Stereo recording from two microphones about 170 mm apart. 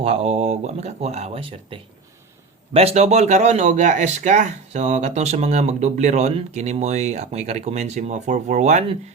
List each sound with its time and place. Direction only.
0.0 s speech: 35° right (ahead or behind)